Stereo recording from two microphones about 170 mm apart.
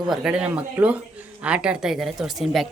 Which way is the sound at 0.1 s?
5° right (ahead or behind).